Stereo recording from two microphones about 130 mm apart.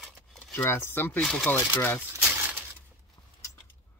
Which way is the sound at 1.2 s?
5° left (ahead or behind).